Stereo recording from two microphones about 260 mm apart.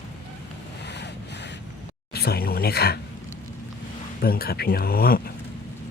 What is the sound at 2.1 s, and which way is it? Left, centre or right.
Speech, left.